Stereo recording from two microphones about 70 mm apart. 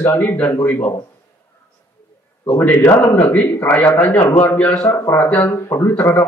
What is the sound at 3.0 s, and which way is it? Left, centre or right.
A man's voice, left.